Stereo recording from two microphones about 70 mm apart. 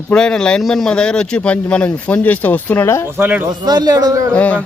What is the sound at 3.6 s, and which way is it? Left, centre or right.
Speech, right.